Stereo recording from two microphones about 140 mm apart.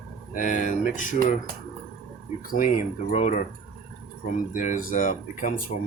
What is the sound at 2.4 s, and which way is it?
Speech, 75° left (ahead or behind).